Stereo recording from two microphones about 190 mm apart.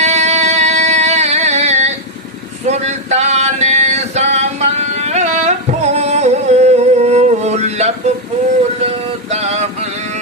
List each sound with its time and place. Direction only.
0.0 s a sound: 35° right (ahead or behind)
2.6 s male singing: 35° right (ahead or behind)
9.3 s male singing: 35° right (ahead or behind)